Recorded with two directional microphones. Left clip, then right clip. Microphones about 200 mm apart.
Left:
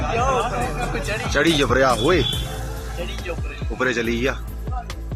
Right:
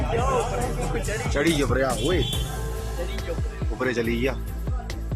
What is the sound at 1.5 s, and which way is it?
Speech, 20° left (ahead or behind).